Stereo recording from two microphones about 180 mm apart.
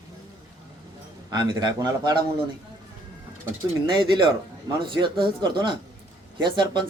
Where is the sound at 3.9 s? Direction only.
25° right (ahead or behind).